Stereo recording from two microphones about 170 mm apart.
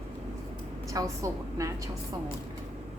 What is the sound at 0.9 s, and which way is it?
Speech, 20° right (ahead or behind).